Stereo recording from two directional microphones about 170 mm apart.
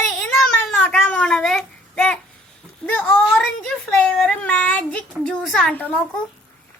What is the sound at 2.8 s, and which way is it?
Speech, 10° left (ahead or behind).